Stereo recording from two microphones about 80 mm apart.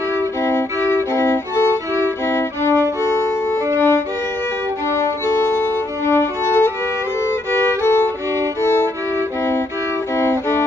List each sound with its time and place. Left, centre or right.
0.4 s music: left
5.6 s music: left
10.1 s music: left